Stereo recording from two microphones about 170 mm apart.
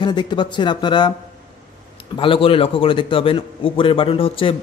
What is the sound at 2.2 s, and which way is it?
Speech, 30° left (ahead or behind).